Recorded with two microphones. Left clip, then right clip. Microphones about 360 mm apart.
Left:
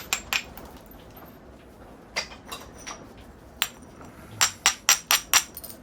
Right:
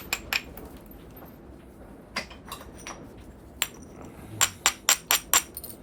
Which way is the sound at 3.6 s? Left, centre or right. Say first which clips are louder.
Left 2 dB; centre.